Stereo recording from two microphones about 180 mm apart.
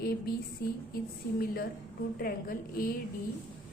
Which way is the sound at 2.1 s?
55° left (ahead or behind).